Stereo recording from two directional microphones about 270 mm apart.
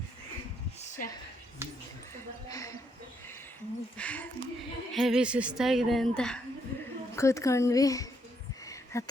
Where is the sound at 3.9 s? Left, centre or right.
Centre.